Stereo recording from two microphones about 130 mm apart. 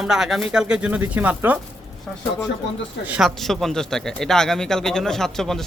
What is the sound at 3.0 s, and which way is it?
Speech, 10° right (ahead or behind).